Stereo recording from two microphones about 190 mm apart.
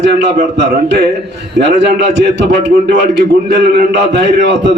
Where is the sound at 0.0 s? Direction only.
65° right (ahead or behind).